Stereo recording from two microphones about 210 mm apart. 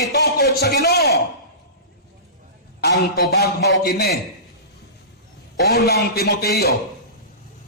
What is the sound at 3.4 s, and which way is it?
Speech, 50° left (ahead or behind).